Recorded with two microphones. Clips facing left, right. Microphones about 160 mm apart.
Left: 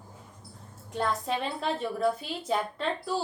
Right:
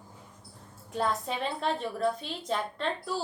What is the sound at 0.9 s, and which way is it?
Speech, centre (ahead or behind).